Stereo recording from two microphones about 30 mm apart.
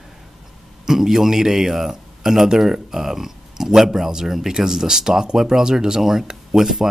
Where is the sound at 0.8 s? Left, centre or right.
Centre.